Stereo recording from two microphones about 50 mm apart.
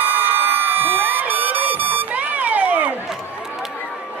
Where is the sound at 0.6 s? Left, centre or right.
Right.